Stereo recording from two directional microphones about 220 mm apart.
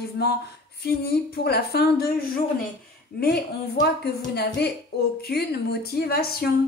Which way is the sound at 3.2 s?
45° left (ahead or behind).